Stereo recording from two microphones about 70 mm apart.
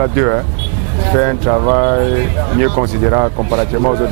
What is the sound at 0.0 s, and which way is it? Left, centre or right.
Speech, right.